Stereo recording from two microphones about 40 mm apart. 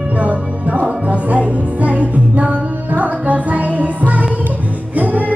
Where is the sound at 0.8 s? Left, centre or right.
Right.